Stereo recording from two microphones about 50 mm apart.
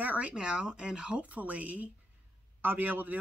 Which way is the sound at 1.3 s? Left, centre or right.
Right.